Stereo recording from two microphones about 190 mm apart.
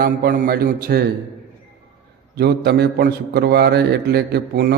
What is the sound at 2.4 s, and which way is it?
A man's voice, 60° right (ahead or behind).